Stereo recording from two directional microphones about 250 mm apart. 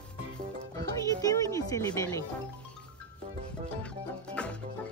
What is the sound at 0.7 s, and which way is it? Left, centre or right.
Speech, centre.